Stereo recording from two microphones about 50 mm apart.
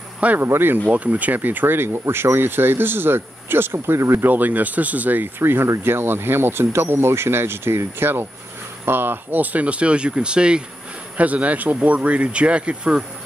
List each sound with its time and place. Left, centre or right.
0.4 s speech: right
0.8 s speech: right
4.3 s speech: right
5.4 s speech: right